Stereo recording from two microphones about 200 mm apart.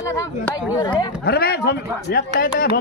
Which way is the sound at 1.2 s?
50° left (ahead or behind).